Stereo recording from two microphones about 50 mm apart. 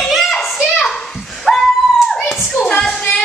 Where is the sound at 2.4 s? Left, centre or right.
Centre.